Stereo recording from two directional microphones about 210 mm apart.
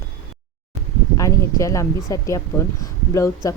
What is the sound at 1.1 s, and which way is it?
Speech, 15° left (ahead or behind).